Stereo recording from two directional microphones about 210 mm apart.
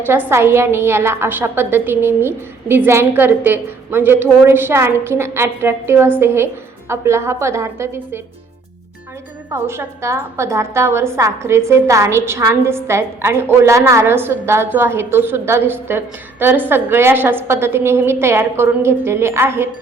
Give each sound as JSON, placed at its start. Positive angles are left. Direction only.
{"t": 0.0, "sound": "a woman's voice", "side_deg": -10}
{"t": 9.5, "sound": "a woman's voice", "side_deg": -10}